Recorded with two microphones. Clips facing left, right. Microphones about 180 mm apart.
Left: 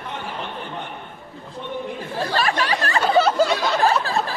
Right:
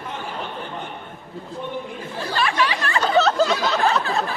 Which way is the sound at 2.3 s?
40° left (ahead or behind).